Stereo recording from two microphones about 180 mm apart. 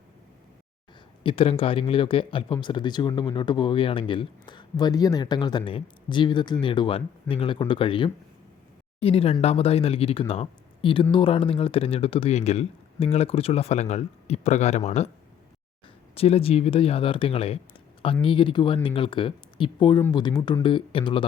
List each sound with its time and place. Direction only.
1.2 s a man's voice: 30° left (ahead or behind)
16.1 s a man's voice: 35° left (ahead or behind)